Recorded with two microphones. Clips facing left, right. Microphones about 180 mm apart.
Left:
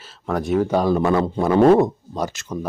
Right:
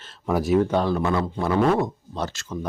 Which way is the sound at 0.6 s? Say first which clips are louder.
Left 4 dB; 10° left (ahead or behind).